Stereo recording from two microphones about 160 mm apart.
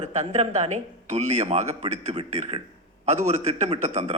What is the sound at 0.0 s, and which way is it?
Speech, 45° right (ahead or behind).